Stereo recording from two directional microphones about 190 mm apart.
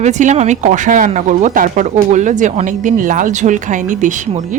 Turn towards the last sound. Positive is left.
turn(degrees=-40)  # may be behind; listen again after turning